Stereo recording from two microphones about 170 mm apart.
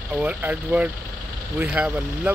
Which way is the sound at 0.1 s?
10° right (ahead or behind).